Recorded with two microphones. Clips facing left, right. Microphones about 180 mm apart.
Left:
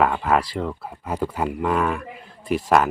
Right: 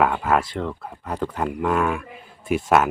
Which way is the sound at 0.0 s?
Centre (ahead or behind).